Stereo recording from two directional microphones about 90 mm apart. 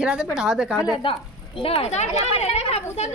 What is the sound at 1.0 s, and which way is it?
Speech, 75° left (ahead or behind).